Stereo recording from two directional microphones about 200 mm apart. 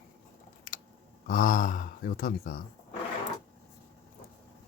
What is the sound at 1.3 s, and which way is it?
Speech, 45° left (ahead or behind).